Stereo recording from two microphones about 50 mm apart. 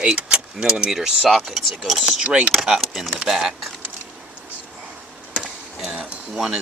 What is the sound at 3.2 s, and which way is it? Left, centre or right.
Speech, centre.